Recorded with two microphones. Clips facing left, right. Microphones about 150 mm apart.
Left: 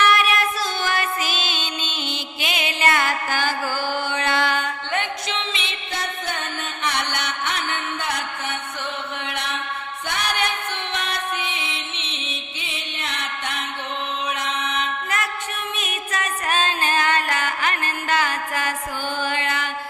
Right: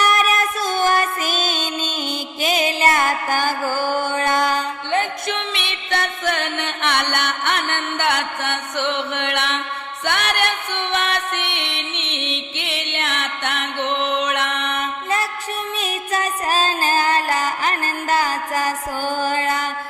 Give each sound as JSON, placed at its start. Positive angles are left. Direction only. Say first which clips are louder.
{"t": 0.0, "sound": "music", "louder": "right 1 dB", "side_deg": -40}
{"t": 5.3, "sound": "music", "louder": "right 3 dB", "side_deg": -60}
{"t": 15.8, "sound": "music", "louder": "right 6 dB", "side_deg": -35}
{"t": 19.2, "sound": "mantra", "louder": "right 4 dB", "side_deg": -40}